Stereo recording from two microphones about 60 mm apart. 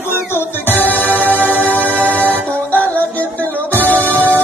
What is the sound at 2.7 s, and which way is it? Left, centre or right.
Music, left.